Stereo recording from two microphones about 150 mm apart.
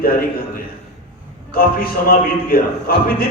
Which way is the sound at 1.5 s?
75° left (ahead or behind).